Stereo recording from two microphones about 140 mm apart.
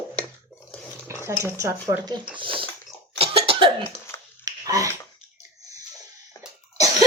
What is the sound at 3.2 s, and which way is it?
Cough, 40° right (ahead or behind).